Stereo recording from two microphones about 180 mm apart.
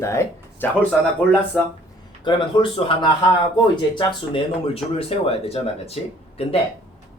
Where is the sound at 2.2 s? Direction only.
30° left (ahead or behind).